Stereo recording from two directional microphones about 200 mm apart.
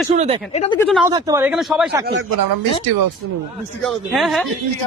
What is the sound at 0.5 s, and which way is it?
Speech, 30° left (ahead or behind).